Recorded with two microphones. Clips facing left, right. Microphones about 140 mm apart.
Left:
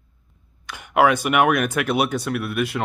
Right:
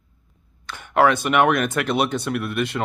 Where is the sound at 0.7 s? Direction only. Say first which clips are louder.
Even; 10° left (ahead or behind).